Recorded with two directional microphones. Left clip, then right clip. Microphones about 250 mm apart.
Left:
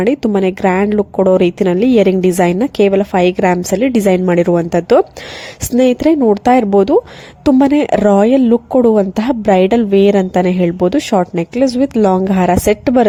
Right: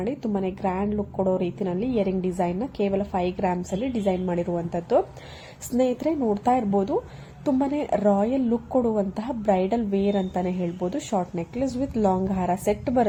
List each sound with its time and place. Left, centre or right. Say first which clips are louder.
0.0 s speech: left 15 dB; left